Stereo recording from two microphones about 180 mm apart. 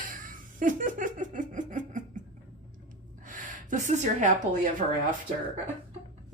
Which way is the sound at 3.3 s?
45° right (ahead or behind).